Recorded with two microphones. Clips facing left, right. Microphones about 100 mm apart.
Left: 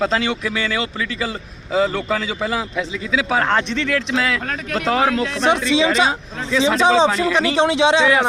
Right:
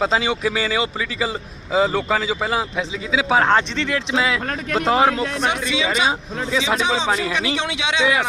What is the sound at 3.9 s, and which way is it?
Speech, 10° right (ahead or behind).